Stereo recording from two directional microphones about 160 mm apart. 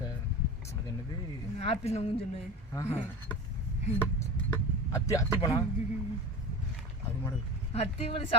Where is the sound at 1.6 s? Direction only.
40° left (ahead or behind).